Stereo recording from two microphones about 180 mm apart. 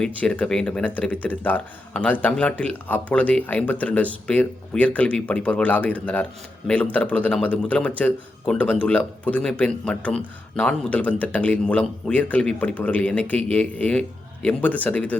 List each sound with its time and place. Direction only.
0.0 s speech: 5° left (ahead or behind)